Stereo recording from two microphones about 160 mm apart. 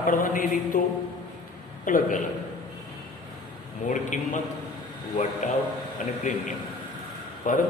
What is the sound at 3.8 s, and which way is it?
Speech, 50° left (ahead or behind).